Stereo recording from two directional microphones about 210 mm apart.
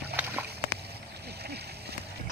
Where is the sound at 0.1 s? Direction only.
50° right (ahead or behind).